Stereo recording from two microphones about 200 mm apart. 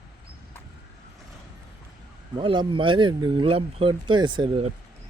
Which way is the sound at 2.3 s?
25° right (ahead or behind).